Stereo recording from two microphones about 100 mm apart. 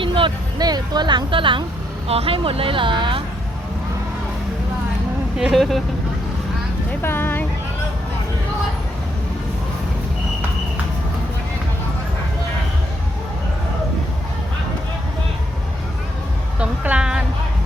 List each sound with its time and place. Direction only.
0.0 s a sound: 60° right (ahead or behind)
0.6 s speech: 45° right (ahead or behind)
2.0 s speech: 80° right; by 3.2 s 55° right (ahead or behind)
5.4 s speech: centre (ahead or behind)
7.0 s speech: 20° left (ahead or behind)
16.6 s a woman's voice: 15° right (ahead or behind)